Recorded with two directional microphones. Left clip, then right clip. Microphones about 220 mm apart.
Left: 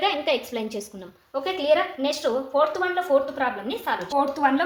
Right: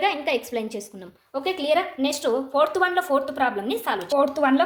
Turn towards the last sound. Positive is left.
turn(degrees=-50)  # may be behind; listen again after turning